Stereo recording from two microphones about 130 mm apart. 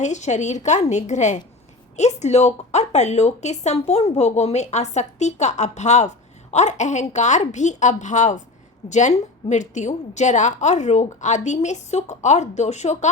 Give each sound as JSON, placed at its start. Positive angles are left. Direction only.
{"t": 0.0, "sound": "a woman's voice", "side_deg": 65}